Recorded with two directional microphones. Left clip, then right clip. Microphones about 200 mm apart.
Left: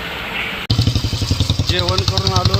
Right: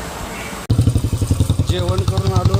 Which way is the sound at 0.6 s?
45° right (ahead or behind).